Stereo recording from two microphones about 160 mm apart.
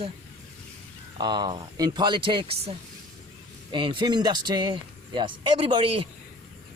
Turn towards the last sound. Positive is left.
turn(degrees=-35)  # may be behind; listen again after turning